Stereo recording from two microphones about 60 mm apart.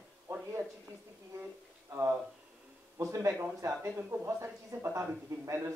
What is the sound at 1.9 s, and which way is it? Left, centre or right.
Speech, right.